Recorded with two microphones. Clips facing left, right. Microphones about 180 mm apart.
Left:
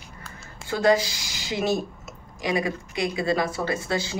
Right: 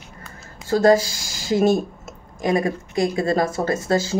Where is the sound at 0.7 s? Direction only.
45° right (ahead or behind).